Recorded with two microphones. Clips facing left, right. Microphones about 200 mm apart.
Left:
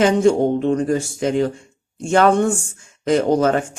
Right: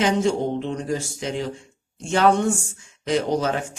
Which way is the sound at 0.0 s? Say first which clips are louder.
Left 6 dB; 50° left (ahead or behind).